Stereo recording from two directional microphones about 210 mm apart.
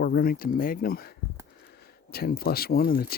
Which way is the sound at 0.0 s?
45° left (ahead or behind).